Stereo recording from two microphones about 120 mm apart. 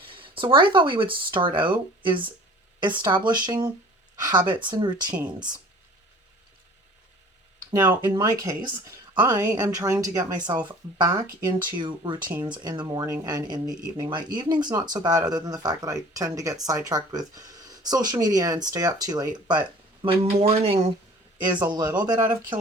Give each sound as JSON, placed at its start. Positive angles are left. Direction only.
{"t": 0.0, "sound": "speech", "side_deg": -45}
{"t": 8.0, "sound": "speech", "side_deg": -30}
{"t": 20.0, "sound": "speech", "side_deg": -50}
{"t": 21.7, "sound": "speech", "side_deg": -35}